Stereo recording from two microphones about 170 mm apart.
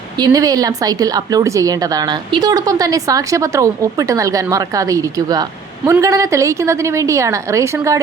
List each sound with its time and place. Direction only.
0.2 s a woman's voice: 20° right (ahead or behind)